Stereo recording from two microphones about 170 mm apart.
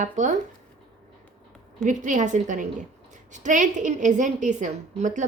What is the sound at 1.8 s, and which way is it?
A woman's voice, 50° right (ahead or behind).